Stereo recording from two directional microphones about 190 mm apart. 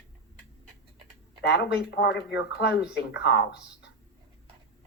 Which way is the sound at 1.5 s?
65° left (ahead or behind).